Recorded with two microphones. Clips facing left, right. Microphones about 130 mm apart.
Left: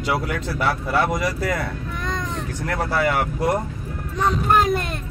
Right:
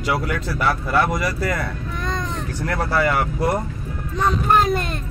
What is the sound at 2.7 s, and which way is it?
Speech, 15° left (ahead or behind).